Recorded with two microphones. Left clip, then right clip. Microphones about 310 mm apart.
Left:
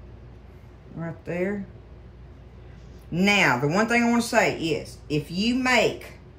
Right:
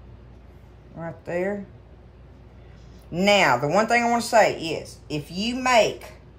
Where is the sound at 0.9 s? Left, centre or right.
Centre.